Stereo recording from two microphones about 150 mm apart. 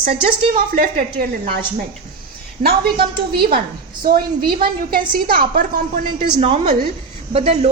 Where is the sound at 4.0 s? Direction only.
80° right.